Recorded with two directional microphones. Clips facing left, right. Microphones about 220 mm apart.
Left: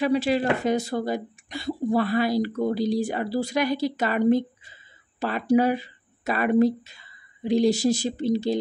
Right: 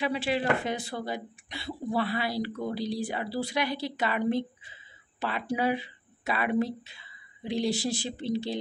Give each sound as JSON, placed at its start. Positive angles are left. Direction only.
{"t": 0.0, "sound": "speech", "side_deg": 40}